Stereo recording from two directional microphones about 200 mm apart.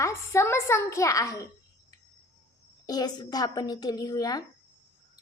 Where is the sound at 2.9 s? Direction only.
20° left (ahead or behind).